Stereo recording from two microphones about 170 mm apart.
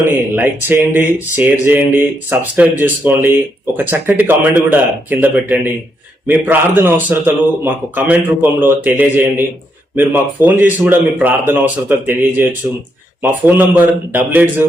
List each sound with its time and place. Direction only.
0.0 s speech: 15° right (ahead or behind)